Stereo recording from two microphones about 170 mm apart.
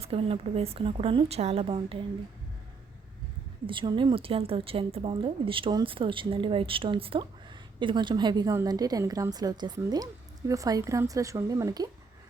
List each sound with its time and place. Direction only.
0.0 s a woman's voice: 35° right (ahead or behind)
3.7 s a woman's voice: 30° right (ahead or behind)